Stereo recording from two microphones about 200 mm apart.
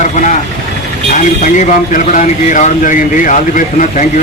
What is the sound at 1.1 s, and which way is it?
Speech, 40° left (ahead or behind).